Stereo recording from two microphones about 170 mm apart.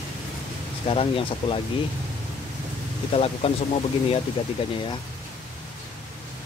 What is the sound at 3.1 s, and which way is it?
Speech, 35° left (ahead or behind).